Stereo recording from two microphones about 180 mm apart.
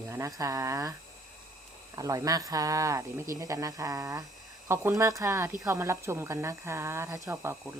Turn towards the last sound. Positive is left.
turn(degrees=-15)  # may be behind; listen again after turning